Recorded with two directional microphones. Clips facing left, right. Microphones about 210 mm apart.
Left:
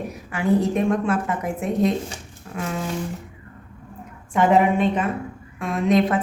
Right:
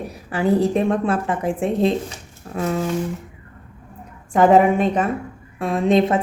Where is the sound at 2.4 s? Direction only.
40° right (ahead or behind).